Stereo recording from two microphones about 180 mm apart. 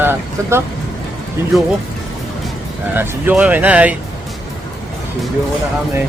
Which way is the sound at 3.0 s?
10° right (ahead or behind).